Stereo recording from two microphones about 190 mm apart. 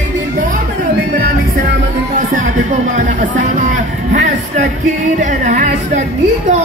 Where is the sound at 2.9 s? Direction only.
40° right (ahead or behind).